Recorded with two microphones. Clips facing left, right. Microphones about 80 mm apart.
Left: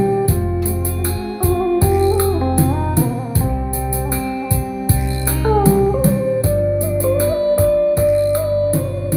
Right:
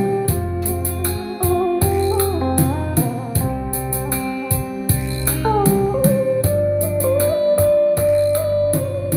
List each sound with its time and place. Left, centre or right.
1.4 s music: centre
5.4 s music: centre
7.0 s music: centre